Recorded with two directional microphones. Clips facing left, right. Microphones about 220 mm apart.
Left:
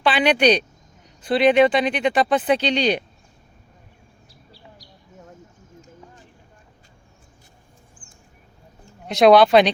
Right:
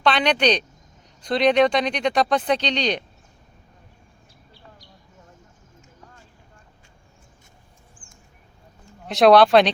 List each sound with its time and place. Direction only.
0.0 s speech: 5° left (ahead or behind)
4.3 s bird: 35° left (ahead or behind)
9.0 s speech: centre (ahead or behind)